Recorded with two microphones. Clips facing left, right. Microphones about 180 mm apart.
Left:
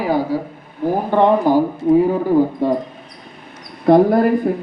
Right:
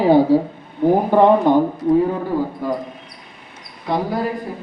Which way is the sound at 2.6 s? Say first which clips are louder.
Left 5 dB; 25° left (ahead or behind).